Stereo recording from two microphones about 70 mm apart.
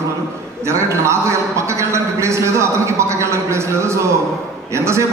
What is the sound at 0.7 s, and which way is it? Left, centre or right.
A man's voice, right.